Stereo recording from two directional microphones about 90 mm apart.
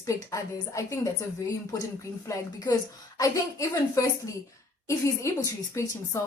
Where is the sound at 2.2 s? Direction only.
35° left (ahead or behind).